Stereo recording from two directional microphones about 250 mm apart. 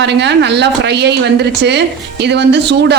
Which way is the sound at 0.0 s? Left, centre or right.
Right.